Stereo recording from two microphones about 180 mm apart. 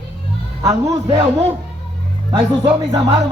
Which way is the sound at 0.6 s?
20° right (ahead or behind).